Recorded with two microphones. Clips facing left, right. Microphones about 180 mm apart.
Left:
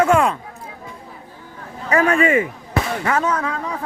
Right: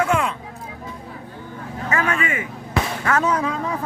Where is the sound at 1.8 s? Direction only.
35° left (ahead or behind).